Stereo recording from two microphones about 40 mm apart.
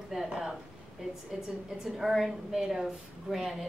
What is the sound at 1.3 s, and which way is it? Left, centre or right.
A woman's voice, centre.